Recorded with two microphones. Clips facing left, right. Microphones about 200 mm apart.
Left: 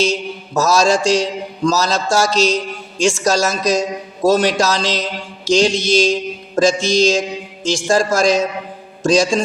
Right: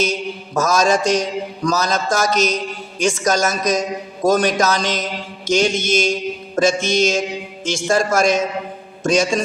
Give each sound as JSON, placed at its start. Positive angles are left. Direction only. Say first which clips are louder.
{"t": 0.0, "sound": "mantra", "louder": "left 2 dB", "side_deg": 30}